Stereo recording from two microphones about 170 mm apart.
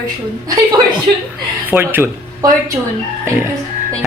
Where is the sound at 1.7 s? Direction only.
10° right (ahead or behind).